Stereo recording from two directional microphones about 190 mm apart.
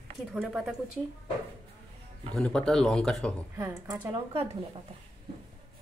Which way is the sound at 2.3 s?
5° left (ahead or behind).